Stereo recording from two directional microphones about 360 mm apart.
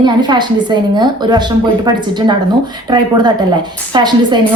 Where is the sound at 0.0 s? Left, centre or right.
Centre.